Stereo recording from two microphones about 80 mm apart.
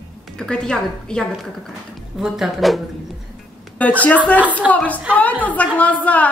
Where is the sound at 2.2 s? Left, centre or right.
Centre.